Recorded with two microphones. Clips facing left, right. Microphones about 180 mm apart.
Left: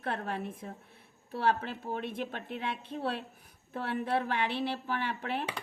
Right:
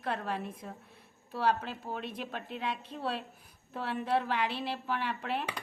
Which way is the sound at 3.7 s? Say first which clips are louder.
Even; 55° left (ahead or behind).